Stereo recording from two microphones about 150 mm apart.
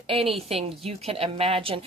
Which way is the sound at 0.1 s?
40° right (ahead or behind).